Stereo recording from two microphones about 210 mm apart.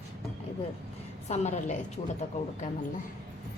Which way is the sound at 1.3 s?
30° left (ahead or behind).